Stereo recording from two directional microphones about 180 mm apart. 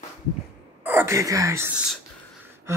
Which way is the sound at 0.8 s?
15° right (ahead or behind).